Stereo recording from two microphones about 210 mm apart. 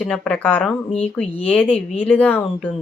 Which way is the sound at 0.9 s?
30° left (ahead or behind).